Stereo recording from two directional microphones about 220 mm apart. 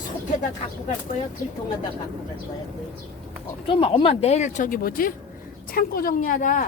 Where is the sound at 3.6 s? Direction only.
25° left (ahead or behind).